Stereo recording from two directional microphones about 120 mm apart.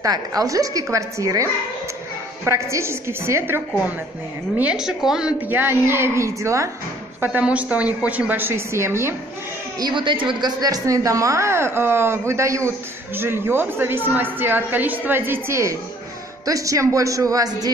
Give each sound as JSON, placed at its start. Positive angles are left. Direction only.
{"t": 0.0, "sound": "speech", "side_deg": -30}
{"t": 4.6, "sound": "a woman's voice", "side_deg": -5}
{"t": 5.5, "sound": "speech", "side_deg": -20}
{"t": 7.2, "sound": "a woman's voice", "side_deg": -10}
{"t": 9.8, "sound": "a man's voice", "side_deg": -40}
{"t": 10.6, "sound": "speech", "side_deg": -30}